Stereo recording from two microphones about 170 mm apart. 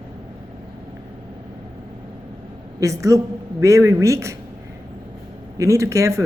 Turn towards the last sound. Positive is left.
turn(degrees=-15)  # may be behind; listen again after turning